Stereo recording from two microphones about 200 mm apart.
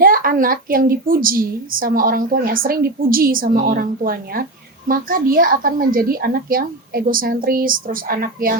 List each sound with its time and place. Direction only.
0.0 s a woman's voice: 45° right (ahead or behind)